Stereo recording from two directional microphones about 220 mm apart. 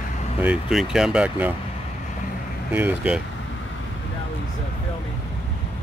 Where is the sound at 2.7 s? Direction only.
10° right (ahead or behind).